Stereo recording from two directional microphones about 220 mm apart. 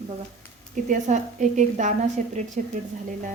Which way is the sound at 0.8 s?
35° right (ahead or behind).